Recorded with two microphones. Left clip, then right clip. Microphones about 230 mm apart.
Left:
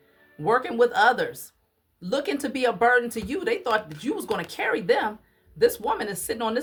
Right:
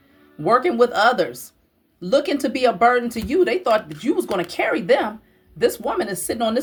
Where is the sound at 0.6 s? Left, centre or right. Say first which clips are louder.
Right 3 dB; centre.